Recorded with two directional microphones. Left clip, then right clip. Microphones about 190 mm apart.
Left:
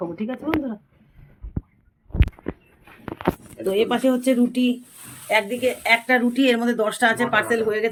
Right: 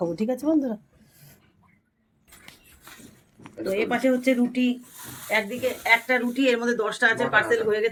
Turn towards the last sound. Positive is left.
turn(degrees=60)  # may be behind; listen again after turning